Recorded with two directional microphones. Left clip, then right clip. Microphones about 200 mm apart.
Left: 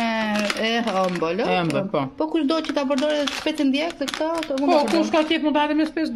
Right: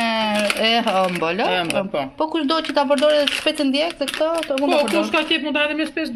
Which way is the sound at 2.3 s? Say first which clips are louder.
Right 2 dB; 15° left (ahead or behind).